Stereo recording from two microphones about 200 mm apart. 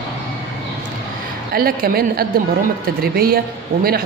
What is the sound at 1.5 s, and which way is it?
A man's voice, 45° right (ahead or behind).